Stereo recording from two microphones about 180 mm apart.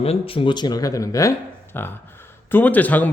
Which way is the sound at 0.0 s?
30° left (ahead or behind).